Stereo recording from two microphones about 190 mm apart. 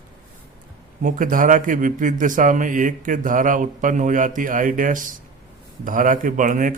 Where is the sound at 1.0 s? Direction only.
45° right (ahead or behind).